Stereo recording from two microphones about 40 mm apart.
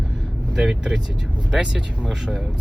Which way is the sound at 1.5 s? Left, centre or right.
Right.